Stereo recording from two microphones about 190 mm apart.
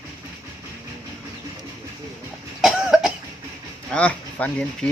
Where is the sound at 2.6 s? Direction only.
Centre (ahead or behind).